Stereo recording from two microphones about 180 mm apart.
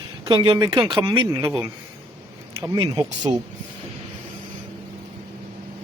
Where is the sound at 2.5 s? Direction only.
20° right (ahead or behind).